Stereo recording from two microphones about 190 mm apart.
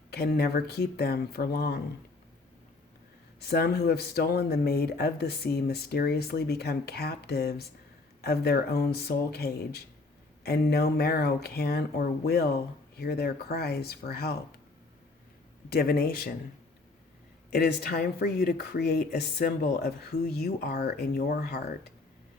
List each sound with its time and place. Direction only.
0.1 s speech: 55° left (ahead or behind)
3.4 s speech: 55° left (ahead or behind)
15.7 s speech: 55° left (ahead or behind)
17.5 s speech: 55° left (ahead or behind)